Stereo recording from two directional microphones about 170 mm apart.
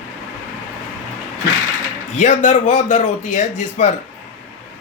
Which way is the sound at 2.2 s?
45° left (ahead or behind).